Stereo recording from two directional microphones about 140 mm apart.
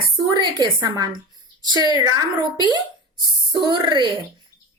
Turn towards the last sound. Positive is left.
turn(degrees=-35)  # may be behind; listen again after turning